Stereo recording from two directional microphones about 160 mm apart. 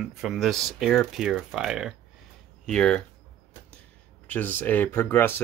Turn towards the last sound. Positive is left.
turn(degrees=15)  # may be behind; listen again after turning